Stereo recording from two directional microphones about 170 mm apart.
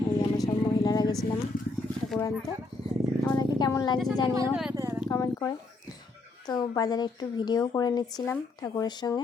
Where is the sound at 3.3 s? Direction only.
20° left (ahead or behind).